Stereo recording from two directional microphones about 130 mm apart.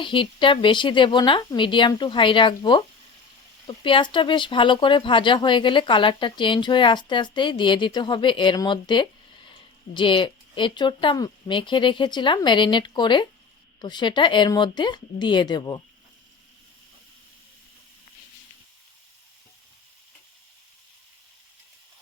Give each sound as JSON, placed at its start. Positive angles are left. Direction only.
{"t": 0.0, "sound": "speech", "side_deg": 40}